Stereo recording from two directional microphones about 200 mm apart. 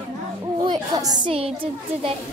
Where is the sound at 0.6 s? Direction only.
20° right (ahead or behind).